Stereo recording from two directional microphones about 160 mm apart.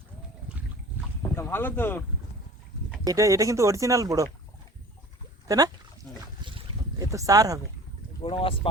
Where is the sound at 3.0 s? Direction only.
20° right (ahead or behind).